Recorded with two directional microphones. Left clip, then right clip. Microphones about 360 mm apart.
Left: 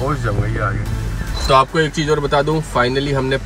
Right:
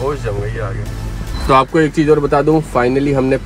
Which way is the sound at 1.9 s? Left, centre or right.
Right.